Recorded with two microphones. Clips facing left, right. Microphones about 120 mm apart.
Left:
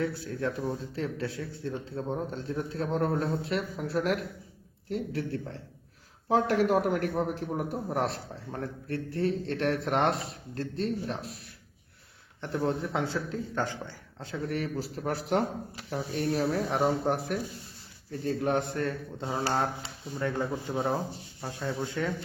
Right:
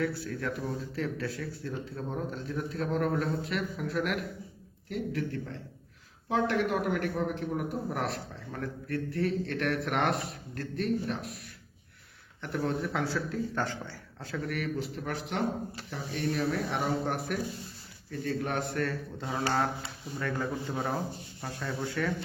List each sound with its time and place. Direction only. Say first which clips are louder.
0.0 s a man's voice: left 1 dB; 25° left (ahead or behind)
12.4 s a man's voice: left 2 dB; 30° left (ahead or behind)
21.8 s speech: right 1 dB; 20° left (ahead or behind)